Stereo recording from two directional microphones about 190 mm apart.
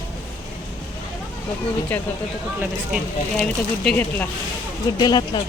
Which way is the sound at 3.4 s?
5° left (ahead or behind).